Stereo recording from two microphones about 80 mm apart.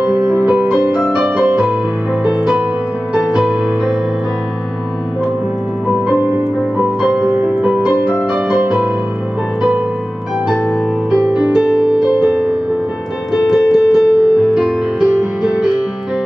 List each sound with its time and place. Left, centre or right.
0.0 s music: centre
5.9 s music: centre
11.1 s music: centre